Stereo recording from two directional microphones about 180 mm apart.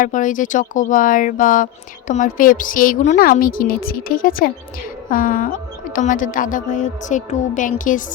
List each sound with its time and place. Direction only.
0.0 s speech: 45° left (ahead or behind)